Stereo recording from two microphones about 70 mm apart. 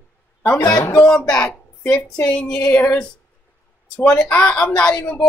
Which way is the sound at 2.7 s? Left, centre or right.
Left.